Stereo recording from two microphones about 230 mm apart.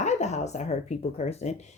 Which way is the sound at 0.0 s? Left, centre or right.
Left.